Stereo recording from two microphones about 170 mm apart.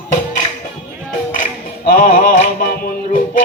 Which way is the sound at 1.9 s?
55° left (ahead or behind).